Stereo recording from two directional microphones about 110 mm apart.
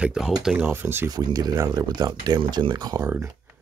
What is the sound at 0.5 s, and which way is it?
Speech, 20° right (ahead or behind).